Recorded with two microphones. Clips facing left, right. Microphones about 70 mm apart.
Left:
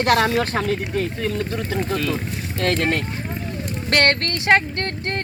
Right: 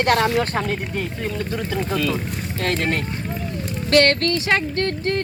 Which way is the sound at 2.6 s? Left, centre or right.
Left.